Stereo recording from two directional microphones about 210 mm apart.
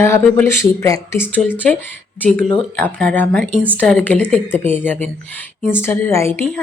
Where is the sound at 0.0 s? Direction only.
10° left (ahead or behind).